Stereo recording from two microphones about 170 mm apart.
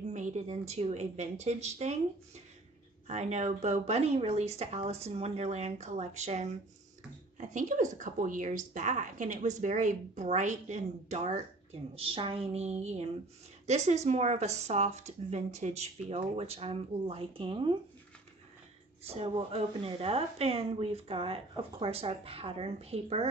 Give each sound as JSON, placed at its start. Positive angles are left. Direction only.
{"t": 0.0, "sound": "speech", "side_deg": -45}
{"t": 3.1, "sound": "a woman's voice", "side_deg": -40}
{"t": 19.0, "sound": "speech", "side_deg": -35}